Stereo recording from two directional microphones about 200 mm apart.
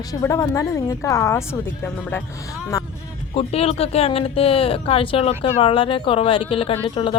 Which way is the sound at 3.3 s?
30° left (ahead or behind).